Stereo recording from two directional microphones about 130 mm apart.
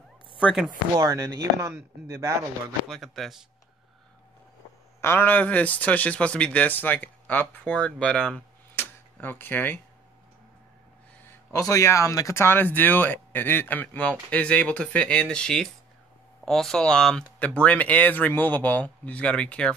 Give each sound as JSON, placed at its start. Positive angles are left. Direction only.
{"t": 0.4, "sound": "chopping", "side_deg": -5}
{"t": 0.7, "sound": "speech", "side_deg": -30}
{"t": 2.9, "sound": "speech", "side_deg": 0}
{"t": 5.0, "sound": "a man's voice", "side_deg": 15}
{"t": 8.7, "sound": "tick-tock", "side_deg": 15}
{"t": 11.6, "sound": "a man's voice", "side_deg": 25}